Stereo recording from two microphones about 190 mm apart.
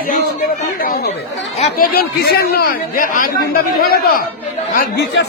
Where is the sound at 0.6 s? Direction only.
55° left (ahead or behind).